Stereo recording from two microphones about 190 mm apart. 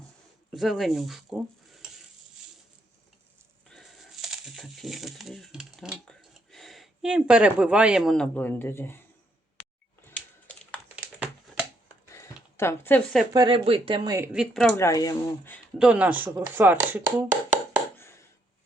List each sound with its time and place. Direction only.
0.5 s speech: centre (ahead or behind)
3.7 s a sound: centre (ahead or behind)
10.1 s typewriter: 10° left (ahead or behind)
12.1 s a sound: 15° left (ahead or behind)
13.3 s speech: 25° right (ahead or behind)
14.3 s speech: centre (ahead or behind)
14.7 s speech: 15° left (ahead or behind)
15.8 s speech: 5° right (ahead or behind)